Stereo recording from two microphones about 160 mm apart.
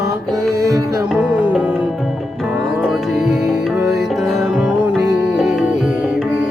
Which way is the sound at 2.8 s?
Centre (ahead or behind).